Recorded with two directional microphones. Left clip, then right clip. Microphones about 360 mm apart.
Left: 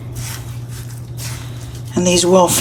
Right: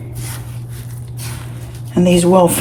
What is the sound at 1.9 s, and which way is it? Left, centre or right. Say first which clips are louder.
Speech: right 1 dB; centre.